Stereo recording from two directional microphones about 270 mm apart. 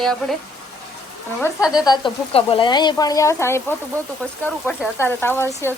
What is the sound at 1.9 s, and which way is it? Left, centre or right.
Speech, centre.